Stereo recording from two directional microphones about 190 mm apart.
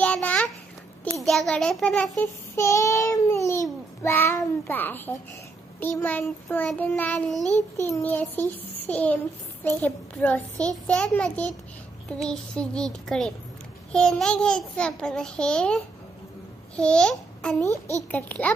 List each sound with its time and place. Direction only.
0.0 s babbling: 5° left (ahead or behind)
1.1 s a child's voice: centre (ahead or behind)
17.6 s a child's voice: 15° right (ahead or behind)
18.1 s a child's voice: 10° left (ahead or behind)